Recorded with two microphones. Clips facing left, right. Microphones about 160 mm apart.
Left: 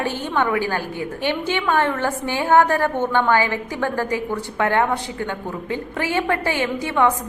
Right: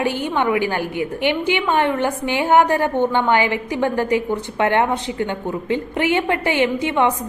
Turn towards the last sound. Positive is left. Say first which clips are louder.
# right 1 dB
turn(degrees=-20)  # may be behind; listen again after turning